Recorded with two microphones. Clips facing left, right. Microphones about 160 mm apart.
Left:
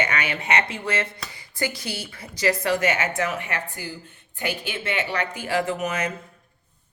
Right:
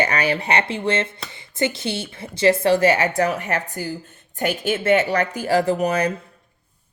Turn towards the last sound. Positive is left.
turn(degrees=-35)  # may be behind; listen again after turning